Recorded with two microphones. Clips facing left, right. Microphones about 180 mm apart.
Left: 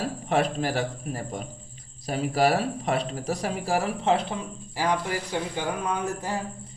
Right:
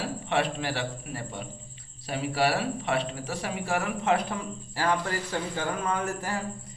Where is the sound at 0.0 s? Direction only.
40° left (ahead or behind); by 6.4 s 20° left (ahead or behind).